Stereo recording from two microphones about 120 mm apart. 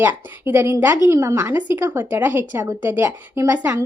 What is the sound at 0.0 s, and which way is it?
A woman's voice, 20° right (ahead or behind).